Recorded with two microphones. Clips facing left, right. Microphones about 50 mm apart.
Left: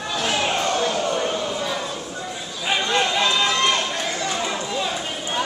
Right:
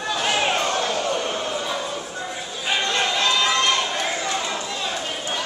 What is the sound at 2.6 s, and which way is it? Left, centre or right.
Run, centre.